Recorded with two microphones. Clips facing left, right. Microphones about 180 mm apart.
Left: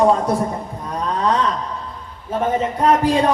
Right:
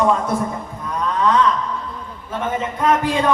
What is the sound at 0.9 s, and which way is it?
Wail, 35° left (ahead or behind).